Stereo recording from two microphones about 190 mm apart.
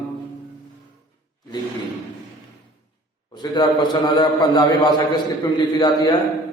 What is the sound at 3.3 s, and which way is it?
A man's voice, 25° left (ahead or behind).